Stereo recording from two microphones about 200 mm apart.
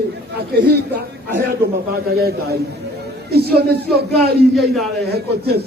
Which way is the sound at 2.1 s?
50° right (ahead or behind).